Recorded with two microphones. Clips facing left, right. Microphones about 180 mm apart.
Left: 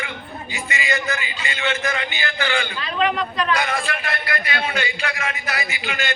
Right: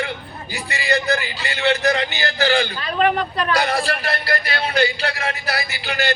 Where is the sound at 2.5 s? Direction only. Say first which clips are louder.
Right 3 dB; 50° right (ahead or behind).